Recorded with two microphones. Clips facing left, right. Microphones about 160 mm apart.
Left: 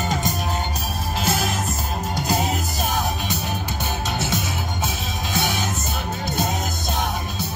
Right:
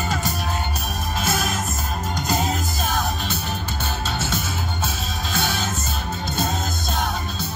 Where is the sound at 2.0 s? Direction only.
10° left (ahead or behind).